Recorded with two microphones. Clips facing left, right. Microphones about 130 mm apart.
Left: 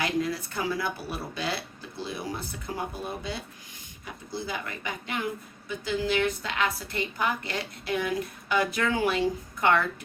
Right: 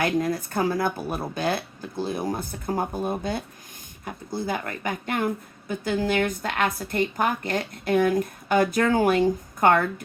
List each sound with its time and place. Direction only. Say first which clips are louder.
0.0 s speech: right 4 dB; 50° right (ahead or behind)